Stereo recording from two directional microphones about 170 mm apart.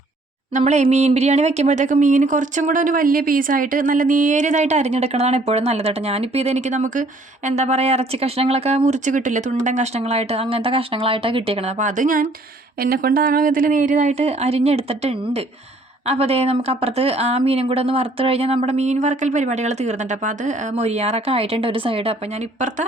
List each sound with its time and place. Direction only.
0.5 s speech: 40° right (ahead or behind)